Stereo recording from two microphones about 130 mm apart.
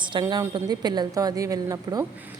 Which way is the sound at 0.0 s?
35° right (ahead or behind).